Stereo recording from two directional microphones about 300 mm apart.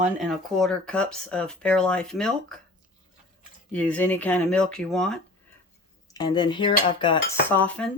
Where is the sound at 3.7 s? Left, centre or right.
Centre.